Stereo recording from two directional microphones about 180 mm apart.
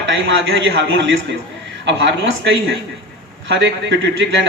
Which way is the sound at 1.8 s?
85° right.